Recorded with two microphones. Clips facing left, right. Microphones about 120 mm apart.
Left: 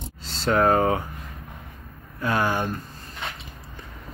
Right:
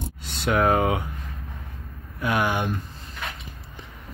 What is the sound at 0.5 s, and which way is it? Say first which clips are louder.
Speech: left 1 dB; 10° right (ahead or behind).